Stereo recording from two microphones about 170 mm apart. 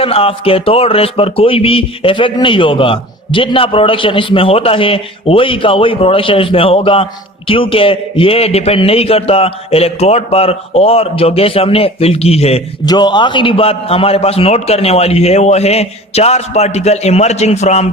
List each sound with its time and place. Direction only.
0.0 s speech: 35° left (ahead or behind)
12.8 s speech: 25° left (ahead or behind); by 17.8 s 40° left (ahead or behind)